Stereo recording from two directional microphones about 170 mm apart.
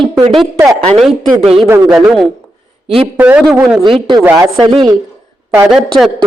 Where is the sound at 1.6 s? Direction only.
15° right (ahead or behind).